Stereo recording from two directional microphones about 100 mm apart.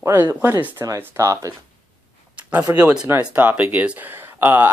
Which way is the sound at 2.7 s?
35° right (ahead or behind).